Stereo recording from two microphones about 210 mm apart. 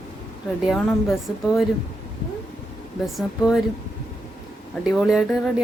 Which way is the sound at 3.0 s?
Centre (ahead or behind).